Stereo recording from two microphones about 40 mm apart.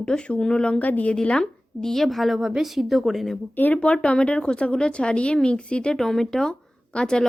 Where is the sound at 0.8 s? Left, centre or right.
Left.